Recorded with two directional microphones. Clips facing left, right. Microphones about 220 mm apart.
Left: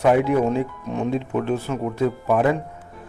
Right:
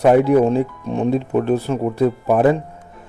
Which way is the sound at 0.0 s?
35° right (ahead or behind).